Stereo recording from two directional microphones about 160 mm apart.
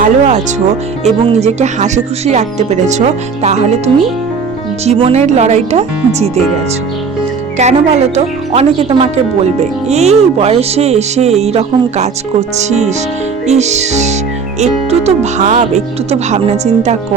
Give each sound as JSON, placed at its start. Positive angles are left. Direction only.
{"t": 0.0, "sound": "speech", "side_deg": -45}
{"t": 4.9, "sound": "speech", "side_deg": -40}
{"t": 7.6, "sound": "a woman's voice", "side_deg": -40}